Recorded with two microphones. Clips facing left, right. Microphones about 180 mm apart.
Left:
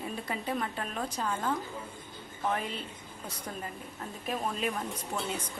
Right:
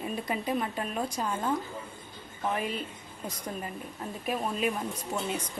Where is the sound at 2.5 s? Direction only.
10° right (ahead or behind).